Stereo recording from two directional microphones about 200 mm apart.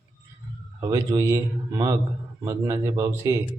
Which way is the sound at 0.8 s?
15° right (ahead or behind).